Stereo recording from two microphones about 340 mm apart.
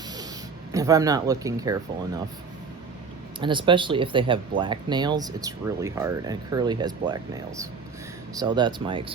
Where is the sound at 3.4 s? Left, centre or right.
Centre.